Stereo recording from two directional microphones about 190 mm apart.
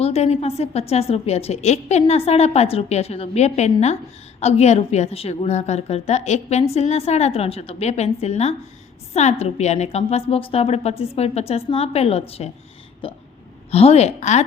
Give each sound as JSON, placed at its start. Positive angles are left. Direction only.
{"t": 0.0, "sound": "a woman's voice", "side_deg": 35}
{"t": 13.0, "sound": "hiccup", "side_deg": 25}
{"t": 13.7, "sound": "a woman's voice", "side_deg": 30}